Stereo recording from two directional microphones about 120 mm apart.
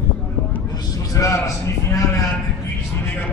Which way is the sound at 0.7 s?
30° left (ahead or behind).